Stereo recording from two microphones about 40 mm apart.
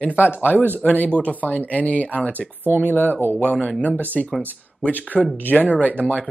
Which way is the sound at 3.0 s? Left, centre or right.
Left.